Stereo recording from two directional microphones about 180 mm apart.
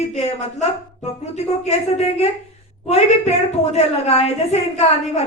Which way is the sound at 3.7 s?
35° left (ahead or behind).